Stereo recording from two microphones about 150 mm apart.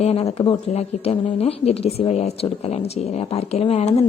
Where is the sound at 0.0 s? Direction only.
40° left (ahead or behind).